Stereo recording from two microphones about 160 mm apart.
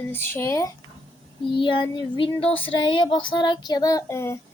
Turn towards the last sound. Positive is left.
turn(degrees=15)  # may be behind; listen again after turning